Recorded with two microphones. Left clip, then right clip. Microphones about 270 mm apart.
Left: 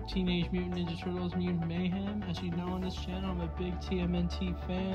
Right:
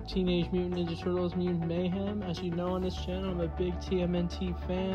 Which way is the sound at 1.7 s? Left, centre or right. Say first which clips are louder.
Right 5 dB; centre.